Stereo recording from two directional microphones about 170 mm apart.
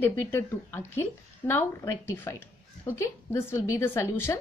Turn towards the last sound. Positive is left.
turn(degrees=15)  # may be behind; listen again after turning